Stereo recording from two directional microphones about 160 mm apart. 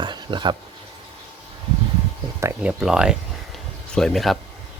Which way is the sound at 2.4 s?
10° right (ahead or behind).